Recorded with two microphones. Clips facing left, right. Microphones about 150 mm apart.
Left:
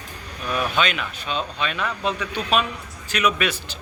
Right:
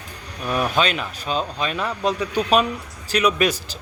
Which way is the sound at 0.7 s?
35° right (ahead or behind).